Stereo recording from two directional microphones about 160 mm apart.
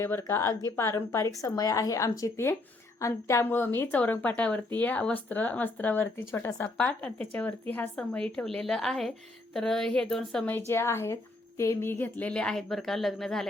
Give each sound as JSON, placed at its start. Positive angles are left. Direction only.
{"t": 0.0, "sound": "a woman's voice", "side_deg": 15}